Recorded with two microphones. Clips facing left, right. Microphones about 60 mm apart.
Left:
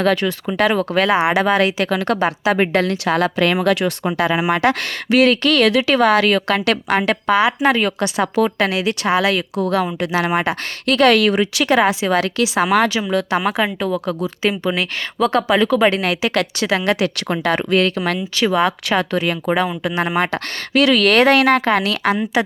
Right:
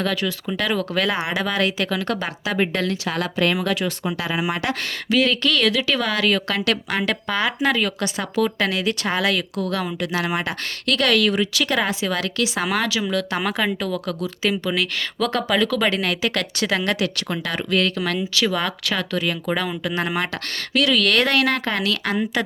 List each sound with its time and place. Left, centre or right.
0.0 s speech: left
1.9 s speech: left
7.3 s speech: centre
7.6 s speech: left
8.6 s speech: centre; by 11.7 s left
12.0 s speech: left
12.7 s speech: left
13.4 s speech: centre
17.5 s speech: left
17.7 s speech: left
19.5 s speech: left